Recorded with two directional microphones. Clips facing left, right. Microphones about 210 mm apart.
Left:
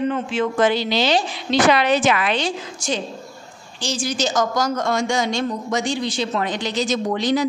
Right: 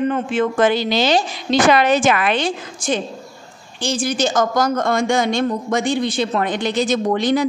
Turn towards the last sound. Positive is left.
turn(degrees=-55)  # may be behind; listen again after turning